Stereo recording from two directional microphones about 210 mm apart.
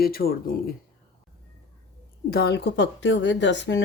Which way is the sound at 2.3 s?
50° left (ahead or behind).